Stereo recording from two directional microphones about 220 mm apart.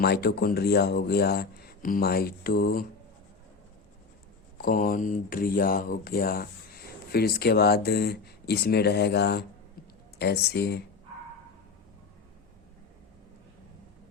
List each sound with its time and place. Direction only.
0.0 s speech: 45° left (ahead or behind)
4.5 s speech: 40° left (ahead or behind)